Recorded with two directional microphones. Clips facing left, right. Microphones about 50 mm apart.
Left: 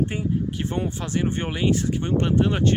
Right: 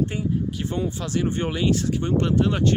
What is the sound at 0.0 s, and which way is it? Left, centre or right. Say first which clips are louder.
Speech: even; left.